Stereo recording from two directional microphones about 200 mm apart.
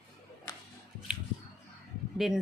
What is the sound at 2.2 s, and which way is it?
Speech, centre (ahead or behind).